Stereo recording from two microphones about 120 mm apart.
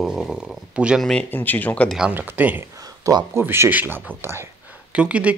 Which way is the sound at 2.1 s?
15° right (ahead or behind).